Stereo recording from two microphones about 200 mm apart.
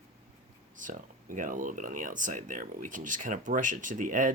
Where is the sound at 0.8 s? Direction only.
40° right (ahead or behind).